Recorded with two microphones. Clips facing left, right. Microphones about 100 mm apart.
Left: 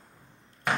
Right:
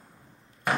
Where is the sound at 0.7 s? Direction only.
Centre (ahead or behind).